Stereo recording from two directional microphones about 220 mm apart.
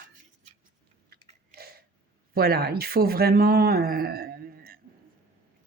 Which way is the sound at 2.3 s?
45° right (ahead or behind).